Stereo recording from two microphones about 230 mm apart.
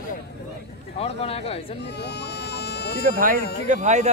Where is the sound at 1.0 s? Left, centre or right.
Left.